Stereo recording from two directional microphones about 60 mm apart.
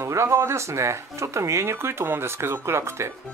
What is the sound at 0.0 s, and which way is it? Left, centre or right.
Speech, right.